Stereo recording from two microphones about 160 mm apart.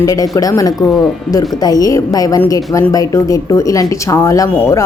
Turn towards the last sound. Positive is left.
turn(degrees=20)  # may be behind; listen again after turning